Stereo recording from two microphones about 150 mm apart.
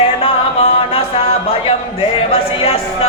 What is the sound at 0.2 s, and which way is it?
Music, 40° left (ahead or behind).